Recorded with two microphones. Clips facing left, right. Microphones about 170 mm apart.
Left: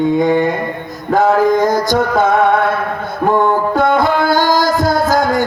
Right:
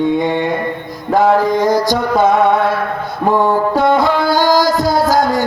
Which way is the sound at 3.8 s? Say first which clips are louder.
Even; 50° left (ahead or behind).